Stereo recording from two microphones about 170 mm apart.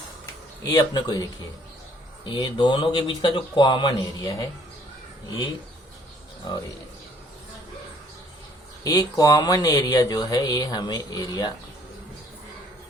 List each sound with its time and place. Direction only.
0.6 s speech: 25° left (ahead or behind)
6.4 s speech: 25° left (ahead or behind)
8.8 s speech: 20° left (ahead or behind)